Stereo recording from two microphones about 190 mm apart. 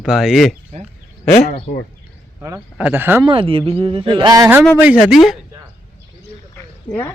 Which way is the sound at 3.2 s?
30° right (ahead or behind).